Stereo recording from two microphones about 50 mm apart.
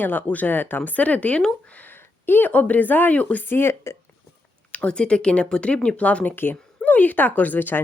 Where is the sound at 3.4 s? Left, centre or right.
Left.